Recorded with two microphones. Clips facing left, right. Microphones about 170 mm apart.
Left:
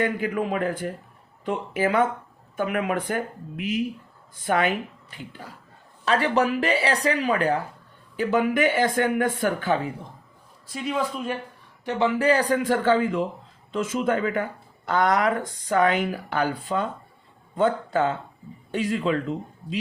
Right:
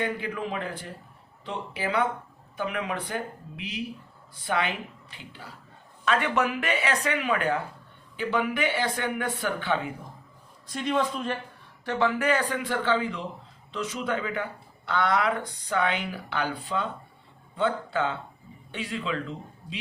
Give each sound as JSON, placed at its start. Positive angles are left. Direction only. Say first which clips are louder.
{"t": 0.0, "sound": "speech", "louder": "left 5 dB", "side_deg": 50}
{"t": 6.1, "sound": "speech", "louder": "left 4 dB", "side_deg": 35}
{"t": 10.7, "sound": "a man's voice", "louder": "even", "side_deg": 5}
{"t": 11.9, "sound": "speech", "louder": "left 3 dB", "side_deg": 20}
{"t": 12.3, "sound": "speech", "louder": "left 6 dB", "side_deg": 40}